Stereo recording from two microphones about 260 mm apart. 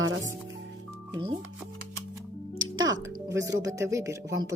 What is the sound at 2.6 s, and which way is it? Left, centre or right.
Music, right.